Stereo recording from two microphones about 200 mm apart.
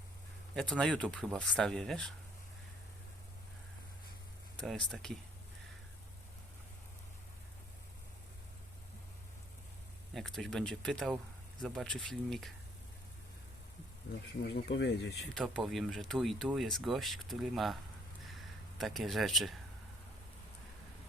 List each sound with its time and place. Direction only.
0.5 s speech: 5° left (ahead or behind)
4.6 s speech: centre (ahead or behind)
10.2 s speech: centre (ahead or behind)
14.4 s speech: 60° left (ahead or behind)
15.4 s speech: centre (ahead or behind)
18.3 s a sound: centre (ahead or behind)